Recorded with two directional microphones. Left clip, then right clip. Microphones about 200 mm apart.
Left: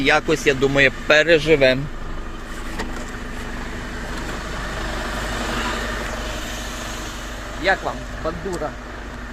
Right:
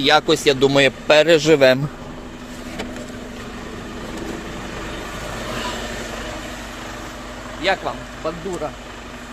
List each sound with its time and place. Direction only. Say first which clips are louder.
0.0 s a man's voice: right 2 dB; 15° right (ahead or behind)
1.4 s a man's voice: right 2 dB; 40° right (ahead or behind)
7.6 s speech: even; centre (ahead or behind)